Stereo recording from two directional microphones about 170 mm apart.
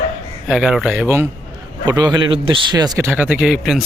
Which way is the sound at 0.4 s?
5° right (ahead or behind).